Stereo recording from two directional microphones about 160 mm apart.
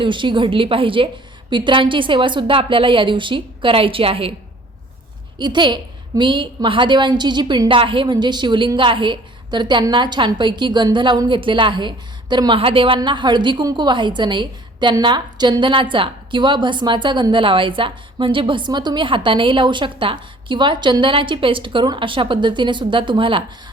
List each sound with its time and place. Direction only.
0.0 s a woman's voice: 30° right (ahead or behind)
5.4 s a woman's voice: 30° right (ahead or behind)